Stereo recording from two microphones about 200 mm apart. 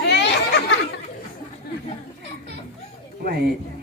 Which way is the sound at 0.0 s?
60° left (ahead or behind).